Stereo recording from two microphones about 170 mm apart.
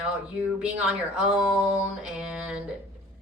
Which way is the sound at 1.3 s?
5° right (ahead or behind).